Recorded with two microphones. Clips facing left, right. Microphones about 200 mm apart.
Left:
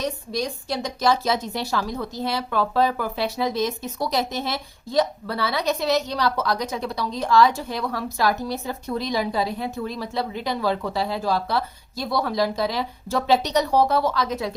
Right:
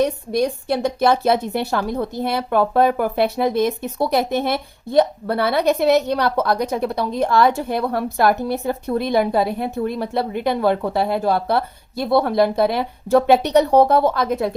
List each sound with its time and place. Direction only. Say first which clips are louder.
0.0 s a woman's voice: right 8 dB; 60° right (ahead or behind)